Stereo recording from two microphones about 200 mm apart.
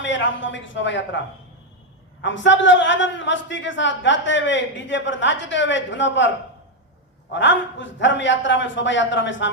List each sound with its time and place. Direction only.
0.0 s speech: 65° left (ahead or behind)
2.2 s a man's voice: 65° left (ahead or behind)
7.3 s a man's voice: 65° left (ahead or behind)